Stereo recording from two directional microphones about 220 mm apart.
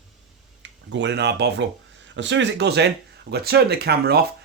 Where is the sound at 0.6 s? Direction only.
55° right (ahead or behind).